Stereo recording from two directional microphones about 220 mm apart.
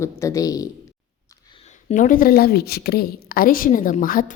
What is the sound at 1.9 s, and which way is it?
A woman's voice, 35° left (ahead or behind).